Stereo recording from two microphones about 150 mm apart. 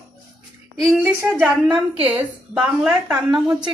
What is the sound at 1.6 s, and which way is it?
Speech, 40° right (ahead or behind).